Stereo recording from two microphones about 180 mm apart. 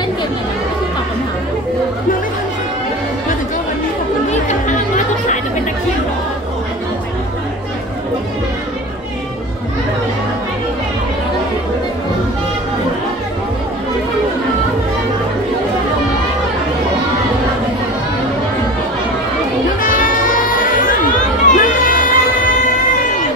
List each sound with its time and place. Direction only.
4.3 s music: 40° left (ahead or behind)
19.8 s music: 50° left (ahead or behind)